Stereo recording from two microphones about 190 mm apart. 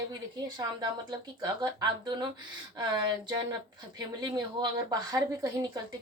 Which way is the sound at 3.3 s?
20° right (ahead or behind).